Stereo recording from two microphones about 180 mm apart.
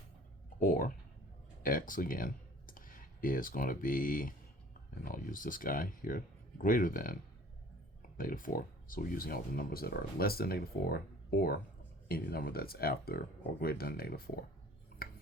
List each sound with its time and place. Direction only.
0.6 s speech: 50° left (ahead or behind)
8.2 s speech: 50° left (ahead or behind)